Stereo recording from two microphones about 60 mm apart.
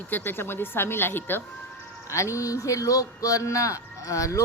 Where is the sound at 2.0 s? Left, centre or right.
Left.